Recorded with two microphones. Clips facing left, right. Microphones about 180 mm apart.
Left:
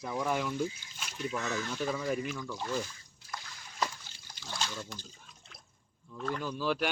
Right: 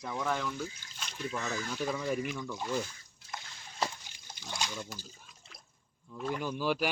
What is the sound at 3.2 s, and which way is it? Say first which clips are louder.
Splash: even; 25° right (ahead or behind).